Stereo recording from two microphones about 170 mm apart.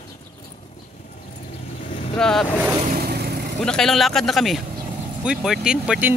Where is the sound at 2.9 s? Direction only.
65° right (ahead or behind).